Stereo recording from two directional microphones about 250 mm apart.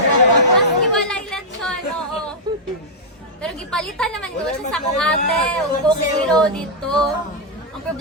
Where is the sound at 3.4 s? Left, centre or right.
Centre.